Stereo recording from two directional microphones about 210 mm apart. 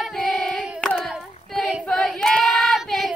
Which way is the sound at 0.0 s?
Centre (ahead or behind).